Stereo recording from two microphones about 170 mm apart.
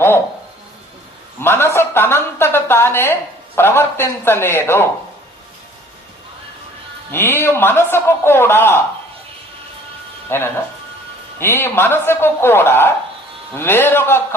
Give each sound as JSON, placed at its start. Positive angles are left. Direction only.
{"t": 1.4, "sound": "a woman's voice", "side_deg": 15}
{"t": 7.1, "sound": "a man's voice", "side_deg": 15}
{"t": 10.2, "sound": "a man's voice", "side_deg": 15}